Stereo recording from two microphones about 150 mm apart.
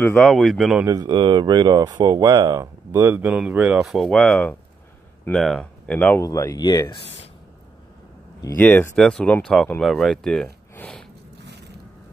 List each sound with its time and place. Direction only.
0.0 s speech: 5° left (ahead or behind)
0.8 s speech: 25° right (ahead or behind); by 6.2 s 10° left (ahead or behind)
6.2 s speech: 20° left (ahead or behind)
8.5 s speech: 15° left (ahead or behind)